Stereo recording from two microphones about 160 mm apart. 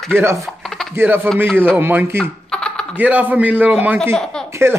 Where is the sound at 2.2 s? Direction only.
5° left (ahead or behind).